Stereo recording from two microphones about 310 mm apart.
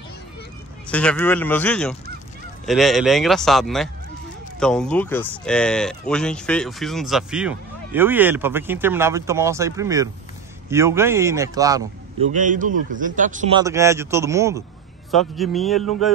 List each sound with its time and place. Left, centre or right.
0.8 s speech: centre
12.3 s a man's voice: right
13.6 s speech: centre